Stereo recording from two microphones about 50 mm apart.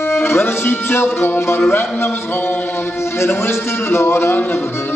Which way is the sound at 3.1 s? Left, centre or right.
Left.